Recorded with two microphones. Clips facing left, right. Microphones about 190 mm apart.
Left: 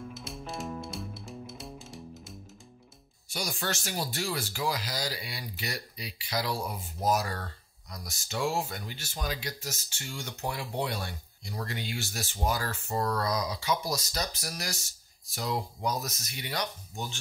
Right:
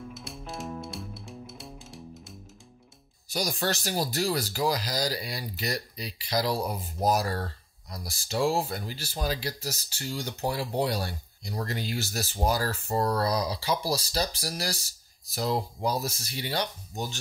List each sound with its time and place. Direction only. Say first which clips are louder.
0.1 s music: even; centre (ahead or behind)
3.3 s speech: right 5 dB; 35° right (ahead or behind)